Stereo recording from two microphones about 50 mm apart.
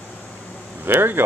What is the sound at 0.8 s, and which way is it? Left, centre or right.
Speech, right.